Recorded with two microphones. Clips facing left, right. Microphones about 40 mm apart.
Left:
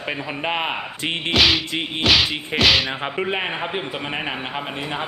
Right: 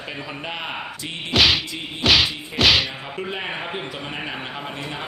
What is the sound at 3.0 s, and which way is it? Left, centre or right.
Speech, left.